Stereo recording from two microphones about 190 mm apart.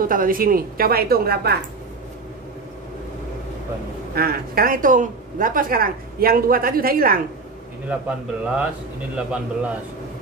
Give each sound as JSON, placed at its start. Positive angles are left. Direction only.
{"t": 0.0, "sound": "a woman's voice", "side_deg": -45}
{"t": 4.1, "sound": "a woman's voice", "side_deg": -55}
{"t": 7.9, "sound": "a man's voice", "side_deg": -5}